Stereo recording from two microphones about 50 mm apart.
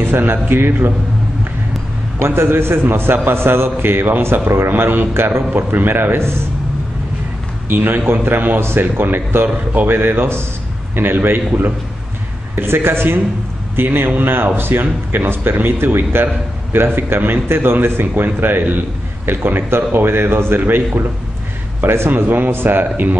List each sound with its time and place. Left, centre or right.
0.0 s a man's voice: right
2.1 s a man's voice: right
7.7 s a man's voice: right
12.5 s a man's voice: right
21.8 s a man's voice: right
22.1 s a man's voice: right